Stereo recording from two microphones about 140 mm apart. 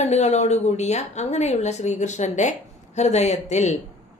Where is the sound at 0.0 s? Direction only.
50° left (ahead or behind).